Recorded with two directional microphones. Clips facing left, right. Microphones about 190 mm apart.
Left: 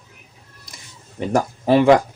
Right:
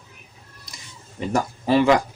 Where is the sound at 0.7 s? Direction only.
50° left (ahead or behind).